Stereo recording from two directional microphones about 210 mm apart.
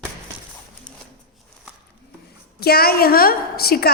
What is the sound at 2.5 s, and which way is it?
A woman's voice, 50° left (ahead or behind).